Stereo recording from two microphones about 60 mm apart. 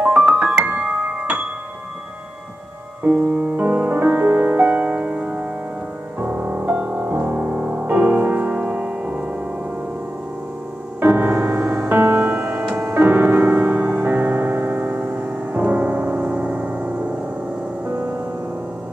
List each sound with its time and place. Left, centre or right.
0.0 s music: right
3.0 s music: right
11.0 s music: right
11.9 s music: right